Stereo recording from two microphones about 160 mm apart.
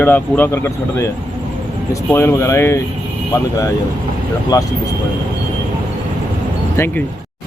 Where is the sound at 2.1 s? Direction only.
15° left (ahead or behind).